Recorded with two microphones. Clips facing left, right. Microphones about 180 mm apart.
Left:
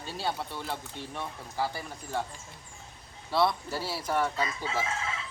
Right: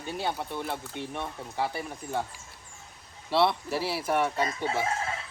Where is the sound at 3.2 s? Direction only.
25° right (ahead or behind).